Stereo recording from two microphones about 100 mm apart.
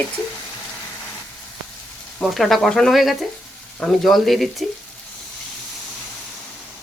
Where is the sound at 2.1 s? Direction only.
Centre (ahead or behind).